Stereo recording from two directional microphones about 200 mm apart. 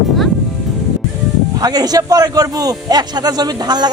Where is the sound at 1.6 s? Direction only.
20° right (ahead or behind).